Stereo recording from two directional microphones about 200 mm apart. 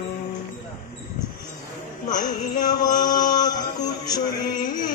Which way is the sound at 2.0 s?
20° left (ahead or behind).